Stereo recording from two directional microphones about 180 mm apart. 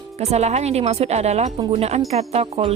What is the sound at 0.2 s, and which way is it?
Speech, 35° right (ahead or behind).